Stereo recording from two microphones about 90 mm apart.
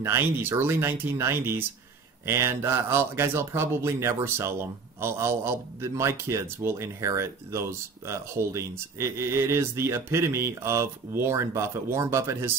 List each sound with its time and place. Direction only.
0.0 s a man's voice: 25° right (ahead or behind)